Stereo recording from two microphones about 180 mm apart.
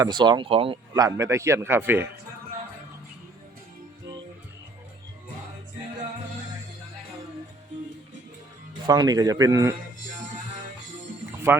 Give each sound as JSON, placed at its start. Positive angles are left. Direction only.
{"t": 0.0, "sound": "a man's voice", "side_deg": -25}
{"t": 8.9, "sound": "speech", "side_deg": -20}